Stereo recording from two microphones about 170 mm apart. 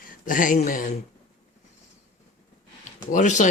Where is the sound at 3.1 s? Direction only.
45° left (ahead or behind).